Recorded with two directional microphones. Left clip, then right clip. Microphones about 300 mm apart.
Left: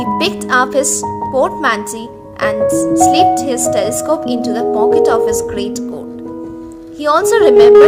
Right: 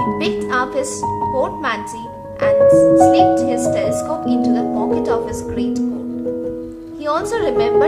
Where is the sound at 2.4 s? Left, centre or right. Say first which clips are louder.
Right 1 dB; left.